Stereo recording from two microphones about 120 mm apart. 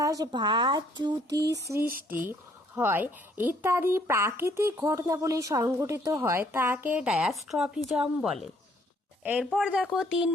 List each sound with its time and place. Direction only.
0.0 s a child's voice: 30° right (ahead or behind); by 10.2 s 5° right (ahead or behind)